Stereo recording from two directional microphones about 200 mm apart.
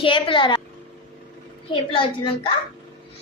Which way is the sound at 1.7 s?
25° left (ahead or behind).